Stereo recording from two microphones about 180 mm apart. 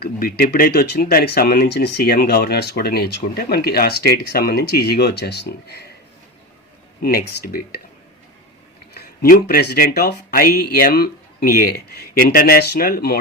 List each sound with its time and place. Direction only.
0.0 s speech: 55° left (ahead or behind)
7.0 s speech: 55° left (ahead or behind)
9.2 s speech: 55° left (ahead or behind)